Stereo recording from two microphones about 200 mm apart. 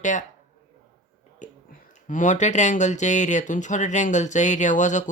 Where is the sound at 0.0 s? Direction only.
40° left (ahead or behind).